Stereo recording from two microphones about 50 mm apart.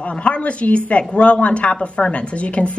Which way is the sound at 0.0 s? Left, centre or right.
Left.